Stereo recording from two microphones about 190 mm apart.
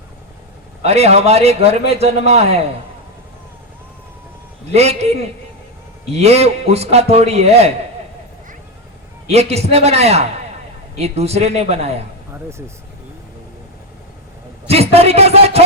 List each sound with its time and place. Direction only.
0.9 s a man's voice: 35° right (ahead or behind)
4.7 s a man's voice: 35° right (ahead or behind)
9.3 s a man's voice: 35° right (ahead or behind)
12.3 s speech: 15° right (ahead or behind)
14.7 s a man's voice: 30° right (ahead or behind)